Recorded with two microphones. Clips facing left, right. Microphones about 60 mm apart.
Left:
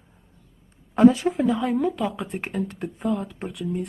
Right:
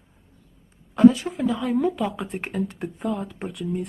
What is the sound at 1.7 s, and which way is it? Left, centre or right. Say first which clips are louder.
Speech: right 1 dB; centre.